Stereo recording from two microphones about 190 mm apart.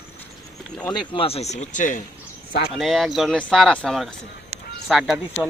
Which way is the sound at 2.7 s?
Centre (ahead or behind).